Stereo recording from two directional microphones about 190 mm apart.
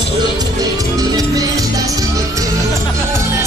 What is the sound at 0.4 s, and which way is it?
Music, 20° right (ahead or behind).